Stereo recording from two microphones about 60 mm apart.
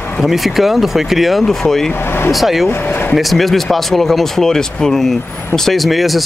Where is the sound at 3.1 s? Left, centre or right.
Centre.